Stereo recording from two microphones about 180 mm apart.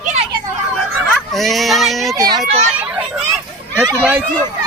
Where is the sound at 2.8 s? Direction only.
5° right (ahead or behind).